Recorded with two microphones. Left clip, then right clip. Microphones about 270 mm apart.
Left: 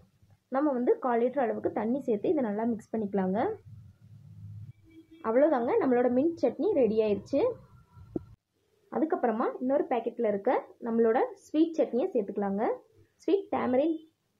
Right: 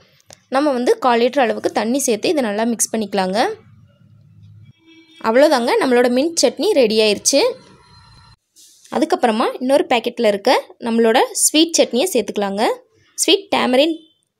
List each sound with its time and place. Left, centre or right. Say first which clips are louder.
0.5 s a woman's voice: right 11 dB; right
5.2 s a woman's voice: right 12 dB; right
8.9 s speech: right 12 dB; right